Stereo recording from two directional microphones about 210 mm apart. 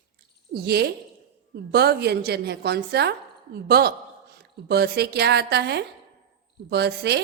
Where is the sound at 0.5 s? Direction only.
50° right (ahead or behind).